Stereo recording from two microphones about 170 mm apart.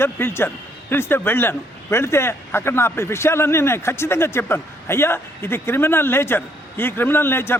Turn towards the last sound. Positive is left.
turn(degrees=15)  # may be behind; listen again after turning